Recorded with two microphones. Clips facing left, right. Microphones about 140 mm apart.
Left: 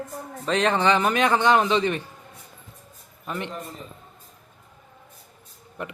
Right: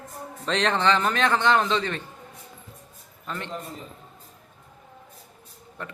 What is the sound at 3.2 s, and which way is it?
Speech, 15° left (ahead or behind).